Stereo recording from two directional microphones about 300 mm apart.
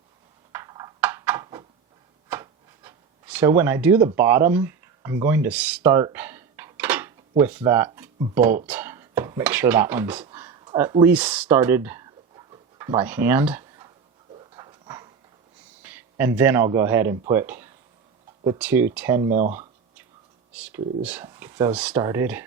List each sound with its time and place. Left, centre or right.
0.5 s a sound: centre
14.3 s dog: centre
15.8 s speech: centre
19.3 s speech: right
20.5 s speech: centre